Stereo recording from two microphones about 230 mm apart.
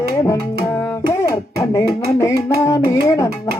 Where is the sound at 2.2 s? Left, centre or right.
Centre.